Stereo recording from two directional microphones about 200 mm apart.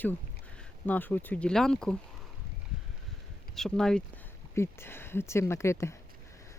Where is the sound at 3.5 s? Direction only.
Centre (ahead or behind).